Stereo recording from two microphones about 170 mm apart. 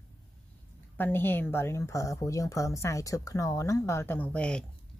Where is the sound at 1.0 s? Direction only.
10° left (ahead or behind).